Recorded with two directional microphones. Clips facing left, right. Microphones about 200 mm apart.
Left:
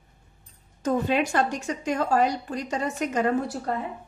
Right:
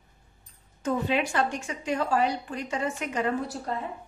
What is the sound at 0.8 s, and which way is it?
A woman's voice, 45° left (ahead or behind).